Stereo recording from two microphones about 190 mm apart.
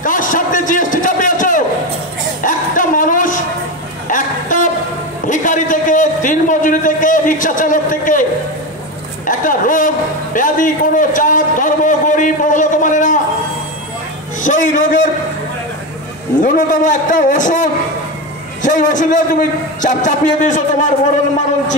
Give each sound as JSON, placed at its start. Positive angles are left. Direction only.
{"t": 0.0, "sound": "a sound", "side_deg": 45}
{"t": 14.4, "sound": "a man's voice", "side_deg": 45}
{"t": 16.3, "sound": "a man's voice", "side_deg": 45}